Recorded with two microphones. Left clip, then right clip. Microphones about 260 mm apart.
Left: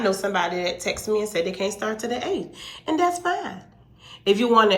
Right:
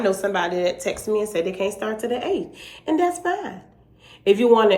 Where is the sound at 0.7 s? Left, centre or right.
Left.